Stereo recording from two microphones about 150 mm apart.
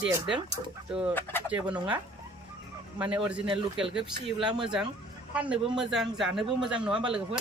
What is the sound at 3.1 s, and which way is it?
A man's voice, 10° right (ahead or behind).